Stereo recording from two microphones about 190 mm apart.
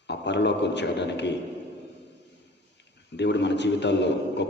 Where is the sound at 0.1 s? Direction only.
65° left (ahead or behind).